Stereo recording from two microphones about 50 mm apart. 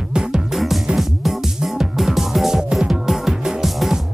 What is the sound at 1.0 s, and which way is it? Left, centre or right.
Music, centre.